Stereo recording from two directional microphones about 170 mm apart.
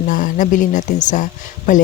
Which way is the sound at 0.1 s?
50° left (ahead or behind).